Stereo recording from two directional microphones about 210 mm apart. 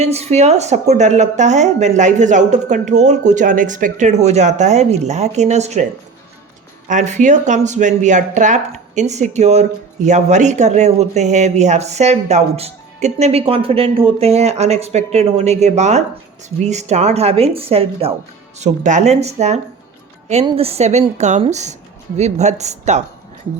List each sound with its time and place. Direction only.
0.0 s speech: 30° right (ahead or behind)
6.8 s a woman's voice: 35° right (ahead or behind)